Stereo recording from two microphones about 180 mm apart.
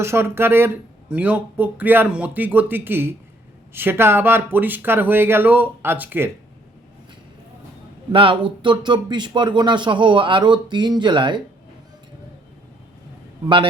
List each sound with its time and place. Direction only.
0.0 s speech: 15° right (ahead or behind)
8.1 s speech: 30° right (ahead or behind)